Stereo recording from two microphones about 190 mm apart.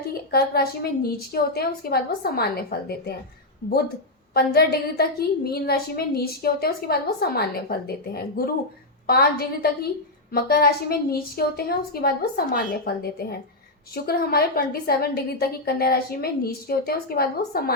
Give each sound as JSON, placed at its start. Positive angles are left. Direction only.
{"t": 0.1, "sound": "a woman's voice", "side_deg": 55}